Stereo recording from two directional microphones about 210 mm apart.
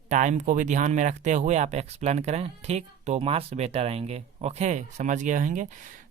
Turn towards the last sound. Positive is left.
turn(degrees=-40)  # may be behind; listen again after turning